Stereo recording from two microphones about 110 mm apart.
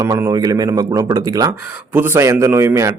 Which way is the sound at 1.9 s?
25° right (ahead or behind).